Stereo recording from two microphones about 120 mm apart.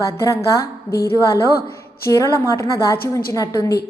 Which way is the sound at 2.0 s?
25° left (ahead or behind).